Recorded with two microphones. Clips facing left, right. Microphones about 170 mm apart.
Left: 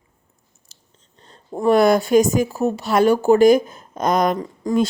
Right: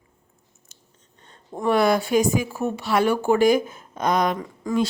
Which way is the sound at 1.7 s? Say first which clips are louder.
Left 5 dB; 45° left (ahead or behind).